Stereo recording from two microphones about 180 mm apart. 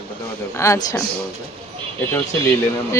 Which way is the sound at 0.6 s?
15° left (ahead or behind).